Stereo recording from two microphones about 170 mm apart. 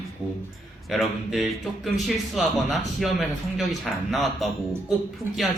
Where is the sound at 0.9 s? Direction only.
Centre (ahead or behind).